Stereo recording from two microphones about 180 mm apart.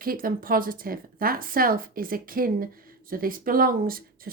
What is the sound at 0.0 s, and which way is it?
A woman's voice, 55° right (ahead or behind).